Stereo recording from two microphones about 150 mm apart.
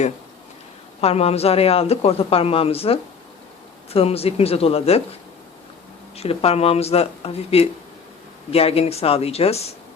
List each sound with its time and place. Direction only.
1.0 s speech: 40° left (ahead or behind)
6.1 s speech: 40° left (ahead or behind)